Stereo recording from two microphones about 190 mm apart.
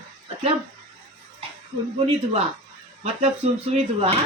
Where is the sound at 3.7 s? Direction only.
30° right (ahead or behind).